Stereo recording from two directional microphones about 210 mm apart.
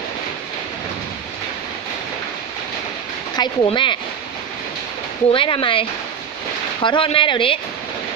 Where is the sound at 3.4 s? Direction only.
25° left (ahead or behind).